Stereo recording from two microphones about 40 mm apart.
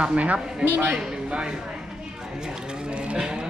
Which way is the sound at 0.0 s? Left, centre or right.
Right.